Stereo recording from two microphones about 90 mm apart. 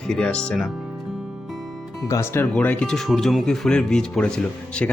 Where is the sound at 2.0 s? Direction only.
30° left (ahead or behind).